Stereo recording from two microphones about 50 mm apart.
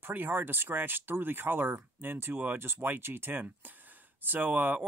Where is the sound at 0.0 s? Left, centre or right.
Right.